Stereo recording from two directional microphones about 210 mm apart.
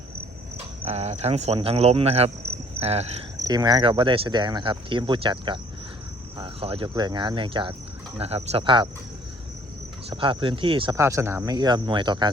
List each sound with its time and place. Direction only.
0.9 s speech: 30° right (ahead or behind)
3.4 s speech: 20° right (ahead or behind)
10.1 s speech: 25° right (ahead or behind)